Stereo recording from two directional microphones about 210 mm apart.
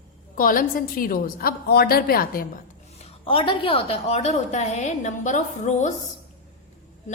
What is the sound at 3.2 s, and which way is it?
A woman's voice, 25° left (ahead or behind).